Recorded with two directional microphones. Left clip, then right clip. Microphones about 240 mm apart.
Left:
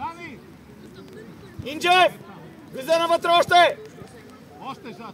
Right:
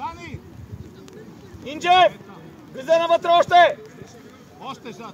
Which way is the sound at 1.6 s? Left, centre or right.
Left.